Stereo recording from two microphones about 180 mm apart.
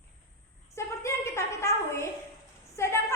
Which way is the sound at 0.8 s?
15° left (ahead or behind).